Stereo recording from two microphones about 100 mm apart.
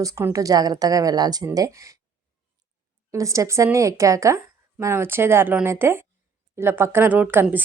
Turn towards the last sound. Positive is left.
turn(degrees=-15)  # may be behind; listen again after turning